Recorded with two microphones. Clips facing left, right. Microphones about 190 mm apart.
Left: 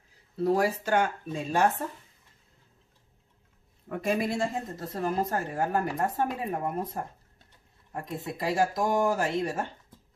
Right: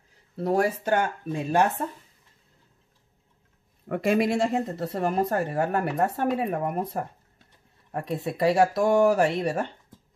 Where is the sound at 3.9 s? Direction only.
80° right.